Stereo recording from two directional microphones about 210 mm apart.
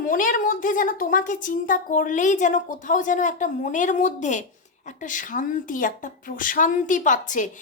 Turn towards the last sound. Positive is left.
turn(degrees=35)  # may be behind; listen again after turning